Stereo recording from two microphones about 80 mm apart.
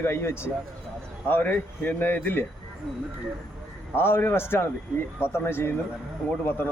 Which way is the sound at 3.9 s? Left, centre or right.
Left.